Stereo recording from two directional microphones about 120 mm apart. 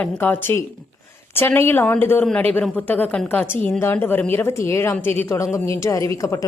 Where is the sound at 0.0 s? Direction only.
15° left (ahead or behind).